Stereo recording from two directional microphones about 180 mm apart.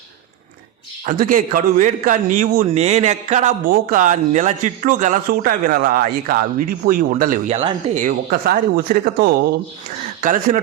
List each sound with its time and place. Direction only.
1.0 s speech: 50° right (ahead or behind)
2.6 s speech: 35° right (ahead or behind); by 9.3 s 55° right (ahead or behind)